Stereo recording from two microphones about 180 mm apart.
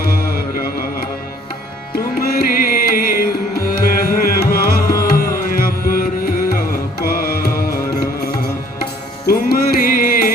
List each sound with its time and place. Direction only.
0.1 s mantra: 55° left (ahead or behind)
2.1 s music: 55° left (ahead or behind)